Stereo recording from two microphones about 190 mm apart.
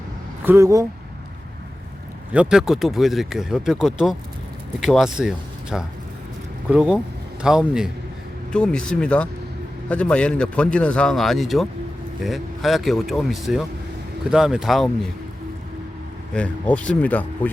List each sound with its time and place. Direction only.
0.4 s speech: 15° right (ahead or behind)
2.3 s speech: 5° right (ahead or behind)
16.3 s speech: 5° left (ahead or behind)